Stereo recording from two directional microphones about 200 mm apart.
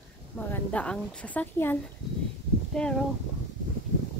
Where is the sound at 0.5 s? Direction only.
5° left (ahead or behind).